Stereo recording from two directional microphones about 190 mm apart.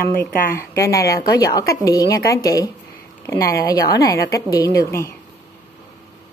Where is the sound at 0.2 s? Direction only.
10° left (ahead or behind).